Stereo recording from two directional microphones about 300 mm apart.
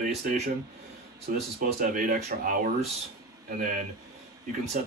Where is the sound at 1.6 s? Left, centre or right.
Right.